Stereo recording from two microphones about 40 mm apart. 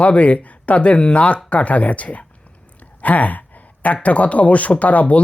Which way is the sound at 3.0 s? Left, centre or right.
Left.